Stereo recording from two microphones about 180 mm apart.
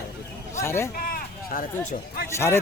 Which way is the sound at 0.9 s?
55° left (ahead or behind).